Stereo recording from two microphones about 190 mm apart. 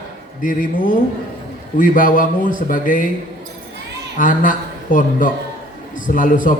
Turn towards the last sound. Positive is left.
turn(degrees=45)  # may be behind; listen again after turning